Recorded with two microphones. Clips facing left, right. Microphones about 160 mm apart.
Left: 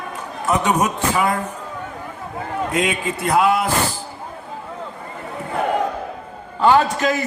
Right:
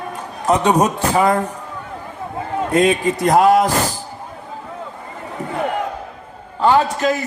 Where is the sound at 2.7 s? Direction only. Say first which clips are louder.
Right 8 dB; 35° right (ahead or behind).